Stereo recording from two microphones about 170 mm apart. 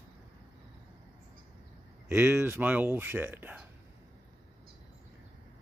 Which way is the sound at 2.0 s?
10° right (ahead or behind).